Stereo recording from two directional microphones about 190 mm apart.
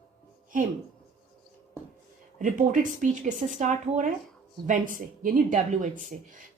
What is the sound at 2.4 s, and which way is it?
Speech, 40° right (ahead or behind).